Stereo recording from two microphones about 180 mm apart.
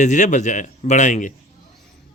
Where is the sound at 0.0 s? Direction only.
45° left (ahead or behind).